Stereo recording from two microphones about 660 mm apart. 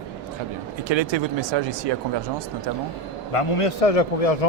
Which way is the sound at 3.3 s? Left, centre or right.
Left.